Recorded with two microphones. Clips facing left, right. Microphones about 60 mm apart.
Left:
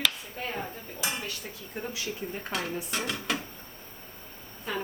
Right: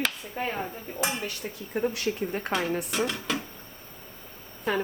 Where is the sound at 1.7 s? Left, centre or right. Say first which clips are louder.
Right 8 dB; right.